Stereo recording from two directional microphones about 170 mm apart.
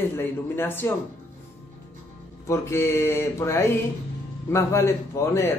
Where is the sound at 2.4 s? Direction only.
15° left (ahead or behind).